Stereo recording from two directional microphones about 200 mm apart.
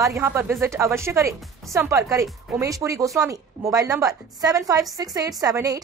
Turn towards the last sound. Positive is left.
turn(degrees=-20)  # may be behind; listen again after turning